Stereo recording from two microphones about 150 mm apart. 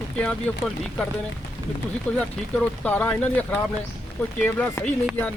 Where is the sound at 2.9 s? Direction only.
10° left (ahead or behind).